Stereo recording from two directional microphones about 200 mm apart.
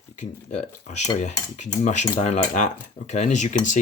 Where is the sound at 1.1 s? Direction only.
35° left (ahead or behind).